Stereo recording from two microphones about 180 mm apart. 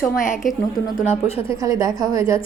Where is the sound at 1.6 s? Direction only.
20° right (ahead or behind).